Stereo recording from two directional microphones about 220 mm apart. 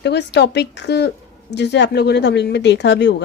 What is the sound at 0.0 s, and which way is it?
Speech, 50° left (ahead or behind).